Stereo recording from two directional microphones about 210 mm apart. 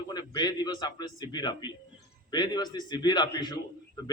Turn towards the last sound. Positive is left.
turn(degrees=20)  # may be behind; listen again after turning